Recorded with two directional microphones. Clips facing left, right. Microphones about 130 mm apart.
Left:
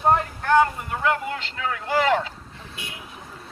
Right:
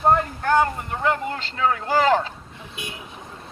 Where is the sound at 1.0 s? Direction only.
35° right (ahead or behind).